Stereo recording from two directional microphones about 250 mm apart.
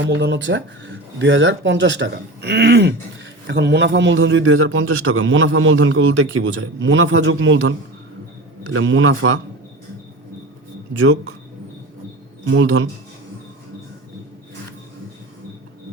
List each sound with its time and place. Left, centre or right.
0.0 s a man's voice: right
12.5 s a man's voice: right